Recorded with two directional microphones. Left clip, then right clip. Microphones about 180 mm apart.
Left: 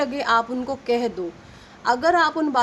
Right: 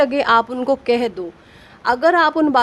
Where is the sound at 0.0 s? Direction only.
55° right (ahead or behind).